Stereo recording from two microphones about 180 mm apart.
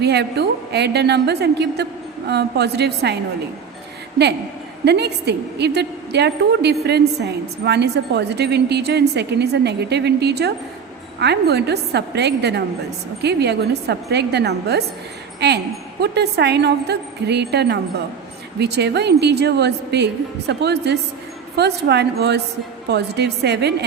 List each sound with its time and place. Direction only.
0.0 s a woman's voice: 70° right (ahead or behind)
4.9 s a woman's voice: 70° right (ahead or behind)